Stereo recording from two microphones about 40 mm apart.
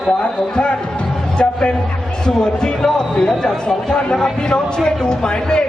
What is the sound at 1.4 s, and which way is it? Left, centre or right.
A woman's voice, left.